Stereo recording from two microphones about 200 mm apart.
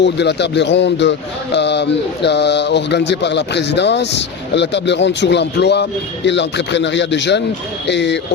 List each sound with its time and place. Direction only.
0.0 s speech: 60° left (ahead or behind)